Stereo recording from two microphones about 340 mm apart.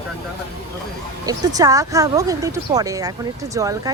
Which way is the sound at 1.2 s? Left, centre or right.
Centre.